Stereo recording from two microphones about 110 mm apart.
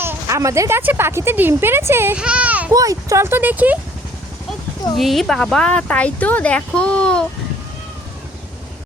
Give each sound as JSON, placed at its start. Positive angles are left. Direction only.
{"t": 0.0, "sound": "speech", "side_deg": -25}
{"t": 2.1, "sound": "a sound", "side_deg": -10}
{"t": 2.7, "sound": "speech", "side_deg": -30}
{"t": 4.9, "sound": "speech", "side_deg": 0}